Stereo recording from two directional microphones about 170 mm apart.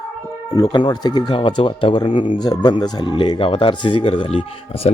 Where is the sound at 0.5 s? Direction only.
20° left (ahead or behind).